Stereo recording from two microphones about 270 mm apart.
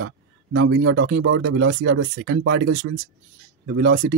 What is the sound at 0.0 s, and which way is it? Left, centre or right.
Speech, right.